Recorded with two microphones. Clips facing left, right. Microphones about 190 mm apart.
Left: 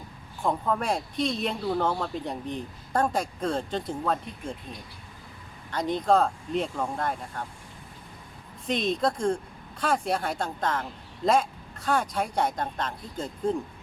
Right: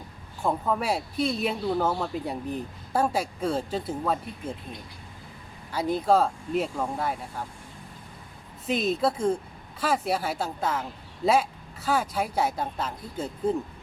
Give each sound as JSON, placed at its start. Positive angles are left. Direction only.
{"t": 0.4, "sound": "speech", "side_deg": -5}
{"t": 5.7, "sound": "speech", "side_deg": -5}
{"t": 8.6, "sound": "speech", "side_deg": -5}